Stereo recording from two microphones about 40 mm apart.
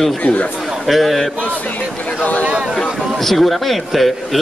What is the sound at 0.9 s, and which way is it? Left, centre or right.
Speech, centre.